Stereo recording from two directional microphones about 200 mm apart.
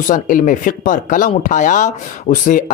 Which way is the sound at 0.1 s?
40° left (ahead or behind).